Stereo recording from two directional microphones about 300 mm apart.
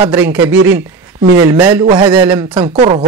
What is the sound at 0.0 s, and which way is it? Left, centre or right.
Speech, centre.